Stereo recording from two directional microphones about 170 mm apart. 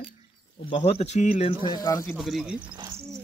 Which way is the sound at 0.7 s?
40° left (ahead or behind).